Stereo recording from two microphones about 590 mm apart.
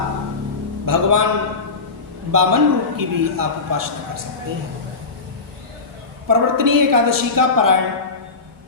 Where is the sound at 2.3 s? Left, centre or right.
Right.